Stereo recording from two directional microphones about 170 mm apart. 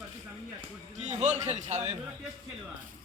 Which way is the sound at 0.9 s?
45° right (ahead or behind).